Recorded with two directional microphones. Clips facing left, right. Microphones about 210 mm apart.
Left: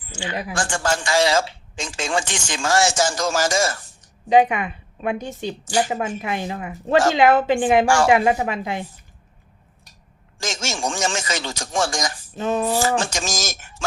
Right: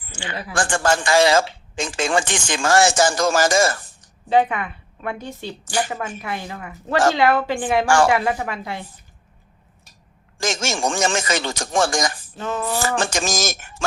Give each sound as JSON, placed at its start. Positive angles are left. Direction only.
{"t": 0.3, "sound": "a woman's voice", "side_deg": 15}
{"t": 0.5, "sound": "speech", "side_deg": -55}
{"t": 4.3, "sound": "a woman's voice", "side_deg": 15}
{"t": 10.3, "sound": "speech", "side_deg": -55}
{"t": 12.4, "sound": "speech", "side_deg": 20}
{"t": 13.0, "sound": "speech", "side_deg": -55}